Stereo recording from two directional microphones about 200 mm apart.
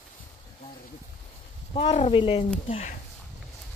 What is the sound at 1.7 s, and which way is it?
A woman's voice, 30° left (ahead or behind).